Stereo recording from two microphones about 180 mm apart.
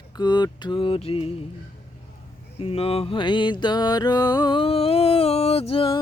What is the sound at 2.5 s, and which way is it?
Music, 35° left (ahead or behind).